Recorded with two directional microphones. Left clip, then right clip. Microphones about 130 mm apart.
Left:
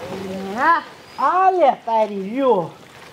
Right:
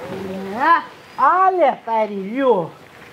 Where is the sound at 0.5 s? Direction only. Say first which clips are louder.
Right 1 dB; 60° right (ahead or behind).